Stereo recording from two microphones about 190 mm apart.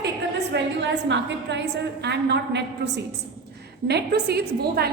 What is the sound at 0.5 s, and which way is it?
A woman's voice, 65° right (ahead or behind).